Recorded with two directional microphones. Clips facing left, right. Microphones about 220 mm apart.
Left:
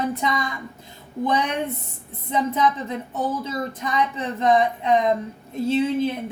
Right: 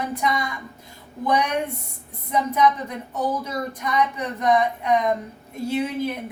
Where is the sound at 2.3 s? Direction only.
25° left (ahead or behind).